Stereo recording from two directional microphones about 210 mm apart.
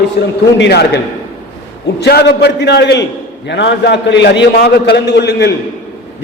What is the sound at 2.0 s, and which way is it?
A man's voice, 50° left (ahead or behind).